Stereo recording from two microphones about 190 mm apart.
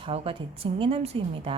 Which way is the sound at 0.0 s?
30° right (ahead or behind).